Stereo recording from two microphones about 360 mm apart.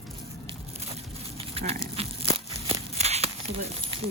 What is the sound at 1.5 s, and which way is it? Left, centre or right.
Livestock, centre.